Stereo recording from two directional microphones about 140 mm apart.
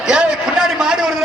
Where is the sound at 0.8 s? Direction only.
5° right (ahead or behind).